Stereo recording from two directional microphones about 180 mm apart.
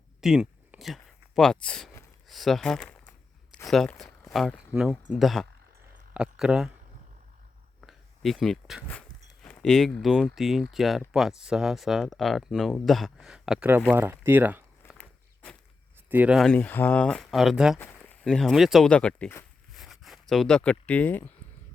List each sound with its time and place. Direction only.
0.2 s a sound: centre (ahead or behind)
2.2 s speech: centre (ahead or behind)
7.8 s speech: centre (ahead or behind)
14.9 s walk: 5° left (ahead or behind)
16.0 s speech: 10° right (ahead or behind)
16.5 s speech: 10° left (ahead or behind)
17.7 s speech: 10° left (ahead or behind)
19.7 s zipper: centre (ahead or behind)
20.3 s speech: centre (ahead or behind)